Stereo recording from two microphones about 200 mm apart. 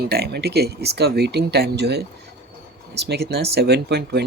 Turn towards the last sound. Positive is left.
turn(degrees=-55)  # may be behind; listen again after turning